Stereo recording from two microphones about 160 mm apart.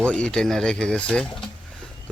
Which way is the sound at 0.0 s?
5° left (ahead or behind).